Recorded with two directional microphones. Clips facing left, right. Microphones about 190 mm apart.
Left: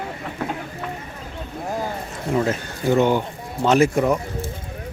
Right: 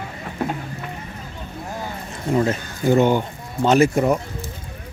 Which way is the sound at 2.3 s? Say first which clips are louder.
Right 2 dB; centre (ahead or behind).